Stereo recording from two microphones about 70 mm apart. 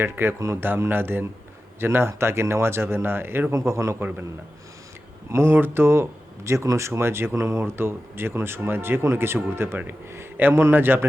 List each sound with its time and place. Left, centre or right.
0.0 s speech: right
0.3 s a man's voice: right
0.6 s speech: right
3.5 s a man's voice: right
5.3 s speech: right
7.6 s speech: right